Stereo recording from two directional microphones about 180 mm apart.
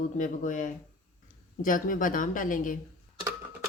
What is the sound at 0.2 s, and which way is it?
Speech, 45° left (ahead or behind).